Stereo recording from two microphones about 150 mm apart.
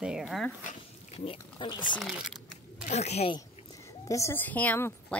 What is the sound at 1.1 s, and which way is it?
Speech, 40° left (ahead or behind).